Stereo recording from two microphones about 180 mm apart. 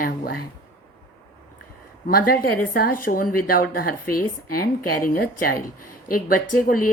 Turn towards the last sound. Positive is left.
turn(degrees=50)  # may be behind; listen again after turning